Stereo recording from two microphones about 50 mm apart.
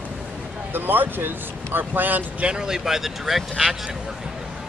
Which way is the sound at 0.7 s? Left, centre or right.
Right.